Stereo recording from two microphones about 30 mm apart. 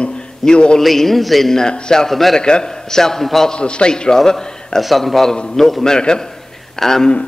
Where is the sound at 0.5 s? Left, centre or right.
Left.